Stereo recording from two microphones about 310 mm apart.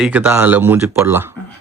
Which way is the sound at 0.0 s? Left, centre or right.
Centre.